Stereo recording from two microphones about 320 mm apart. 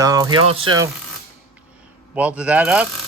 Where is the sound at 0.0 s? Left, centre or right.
Centre.